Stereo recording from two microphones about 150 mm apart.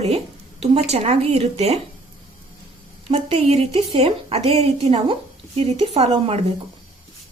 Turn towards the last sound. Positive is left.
turn(degrees=-45)  # may be behind; listen again after turning